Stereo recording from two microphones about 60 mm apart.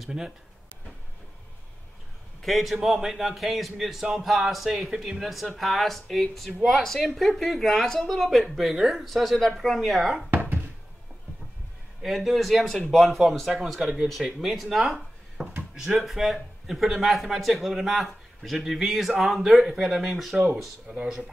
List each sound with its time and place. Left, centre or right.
0.0 s speech: centre
2.4 s a man's voice: centre
12.0 s a man's voice: centre
20.9 s speech: centre